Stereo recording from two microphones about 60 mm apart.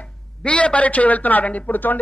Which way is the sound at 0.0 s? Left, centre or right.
Centre.